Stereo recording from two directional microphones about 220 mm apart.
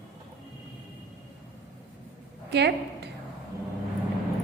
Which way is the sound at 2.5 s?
50° right (ahead or behind).